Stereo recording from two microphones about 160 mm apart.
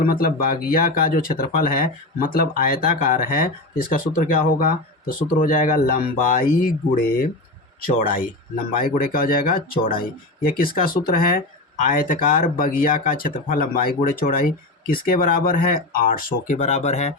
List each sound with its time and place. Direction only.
0.0 s speech: 65° left (ahead or behind)
8.7 s speech: 60° left (ahead or behind); by 17.2 s 45° left (ahead or behind)